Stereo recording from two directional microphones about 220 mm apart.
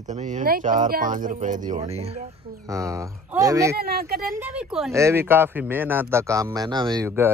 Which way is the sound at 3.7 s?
45° right (ahead or behind).